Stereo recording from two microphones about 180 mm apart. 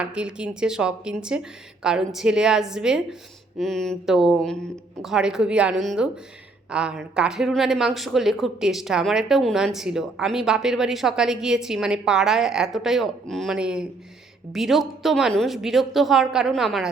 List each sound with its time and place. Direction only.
0.0 s speech: 5° right (ahead or behind)